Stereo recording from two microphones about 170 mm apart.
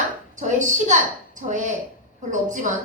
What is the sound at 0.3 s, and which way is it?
A woman's voice, 45° right (ahead or behind).